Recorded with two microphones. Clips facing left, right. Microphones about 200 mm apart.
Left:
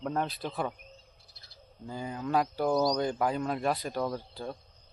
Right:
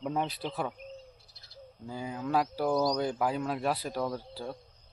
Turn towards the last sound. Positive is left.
turn(degrees=-5)  # may be behind; listen again after turning